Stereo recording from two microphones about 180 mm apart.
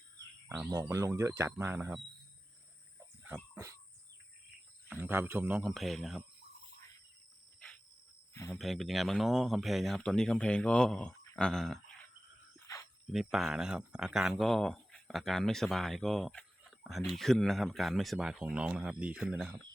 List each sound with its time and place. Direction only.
0.4 s speech: 10° right (ahead or behind)
4.9 s speech: 10° right (ahead or behind)
5.6 s speech: centre (ahead or behind)
8.3 s cricket: 15° left (ahead or behind)
8.5 s speech: centre (ahead or behind)
12.5 s wild animals: 15° left (ahead or behind)
13.1 s speech: centre (ahead or behind)